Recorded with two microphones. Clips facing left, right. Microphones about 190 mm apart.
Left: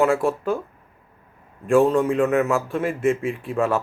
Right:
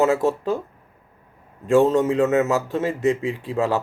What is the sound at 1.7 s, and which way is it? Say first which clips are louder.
Speech: right 1 dB; 25° right (ahead or behind).